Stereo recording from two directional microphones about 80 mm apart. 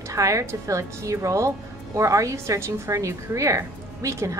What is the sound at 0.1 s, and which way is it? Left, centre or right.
A woman's voice, right.